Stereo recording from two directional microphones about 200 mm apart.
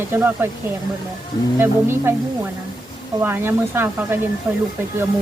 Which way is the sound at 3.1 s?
10° right (ahead or behind).